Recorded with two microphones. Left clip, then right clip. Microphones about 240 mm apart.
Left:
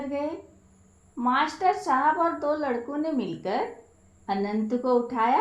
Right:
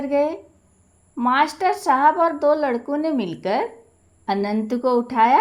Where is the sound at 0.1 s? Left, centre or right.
Right.